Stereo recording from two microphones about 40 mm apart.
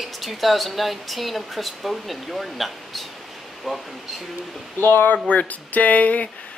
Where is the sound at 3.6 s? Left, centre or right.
Centre.